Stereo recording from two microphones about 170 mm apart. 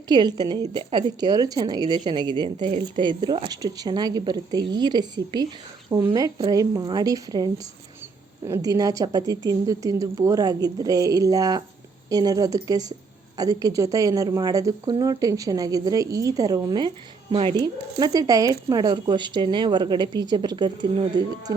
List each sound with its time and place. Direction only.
0.1 s a woman's voice: 25° right (ahead or behind)